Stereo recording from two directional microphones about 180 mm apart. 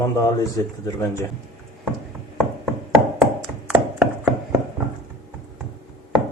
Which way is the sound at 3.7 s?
5° right (ahead or behind).